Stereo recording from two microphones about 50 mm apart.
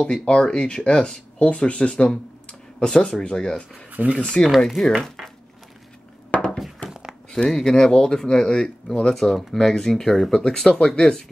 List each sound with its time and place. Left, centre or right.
0.0 s speech: centre
3.9 s speech: right
4.6 s speech: centre
6.3 s a sound: left
6.9 s a sound: centre
7.4 s speech: centre